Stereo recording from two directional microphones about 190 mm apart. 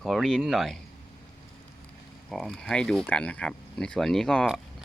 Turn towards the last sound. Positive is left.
turn(degrees=5)  # may be behind; listen again after turning